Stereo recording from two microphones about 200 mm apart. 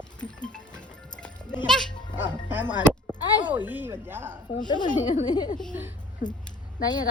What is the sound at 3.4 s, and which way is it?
Speech, 10° right (ahead or behind).